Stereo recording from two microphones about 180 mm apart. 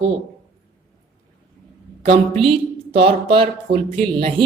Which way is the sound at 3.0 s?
30° right (ahead or behind).